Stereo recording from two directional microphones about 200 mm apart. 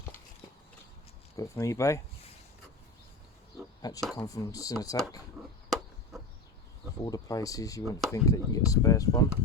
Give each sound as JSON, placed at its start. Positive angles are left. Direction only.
{"t": 1.4, "sound": "speech", "side_deg": 15}
{"t": 3.8, "sound": "speech", "side_deg": 20}
{"t": 7.0, "sound": "speech", "side_deg": 15}